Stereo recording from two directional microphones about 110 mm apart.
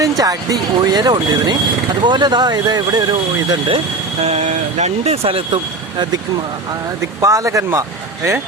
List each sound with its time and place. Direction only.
0.2 s speech: 35° right (ahead or behind)
4.2 s speech: 75° right (ahead or behind)
7.2 s speech: 30° right (ahead or behind)